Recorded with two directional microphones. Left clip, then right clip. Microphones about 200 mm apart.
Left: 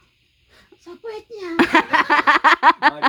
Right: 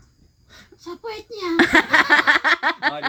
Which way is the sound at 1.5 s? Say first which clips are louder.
Right 1 dB; 25° left (ahead or behind).